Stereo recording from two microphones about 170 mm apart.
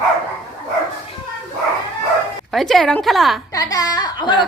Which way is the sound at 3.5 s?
20° left (ahead or behind).